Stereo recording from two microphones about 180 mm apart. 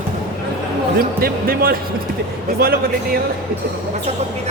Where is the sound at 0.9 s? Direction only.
55° right (ahead or behind).